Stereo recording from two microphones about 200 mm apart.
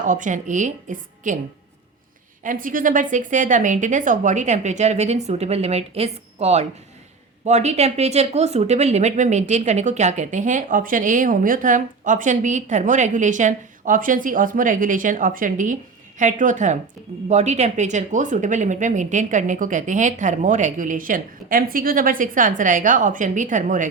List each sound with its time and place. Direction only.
0.0 s speech: 40° right (ahead or behind)
2.4 s speech: 40° right (ahead or behind)